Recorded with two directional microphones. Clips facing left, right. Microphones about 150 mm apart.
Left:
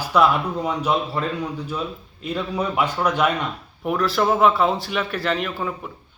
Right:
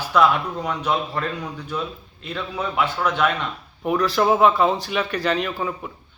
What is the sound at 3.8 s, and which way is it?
A man's voice, centre (ahead or behind).